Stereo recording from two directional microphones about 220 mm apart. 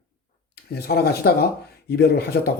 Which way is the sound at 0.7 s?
45° left (ahead or behind).